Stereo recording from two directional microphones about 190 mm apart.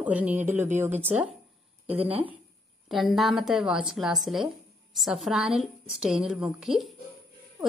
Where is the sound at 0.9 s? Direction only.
35° right (ahead or behind).